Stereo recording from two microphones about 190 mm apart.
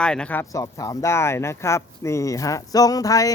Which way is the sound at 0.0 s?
5° left (ahead or behind).